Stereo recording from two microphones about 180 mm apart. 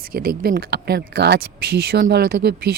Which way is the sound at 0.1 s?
55° right (ahead or behind).